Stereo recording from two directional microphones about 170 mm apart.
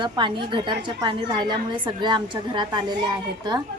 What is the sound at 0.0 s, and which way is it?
A woman's voice, 30° right (ahead or behind).